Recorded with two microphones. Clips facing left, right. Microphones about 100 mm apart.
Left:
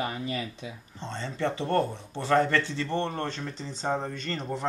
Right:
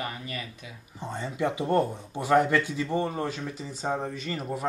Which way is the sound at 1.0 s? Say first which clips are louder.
Right 1 dB; 10° right (ahead or behind).